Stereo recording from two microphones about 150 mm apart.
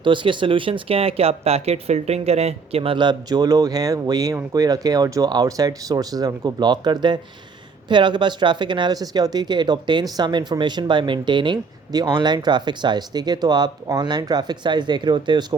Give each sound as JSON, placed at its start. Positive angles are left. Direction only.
{"t": 0.0, "sound": "speech", "side_deg": -35}